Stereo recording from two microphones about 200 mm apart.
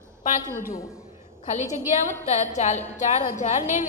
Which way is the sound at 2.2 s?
35° left (ahead or behind).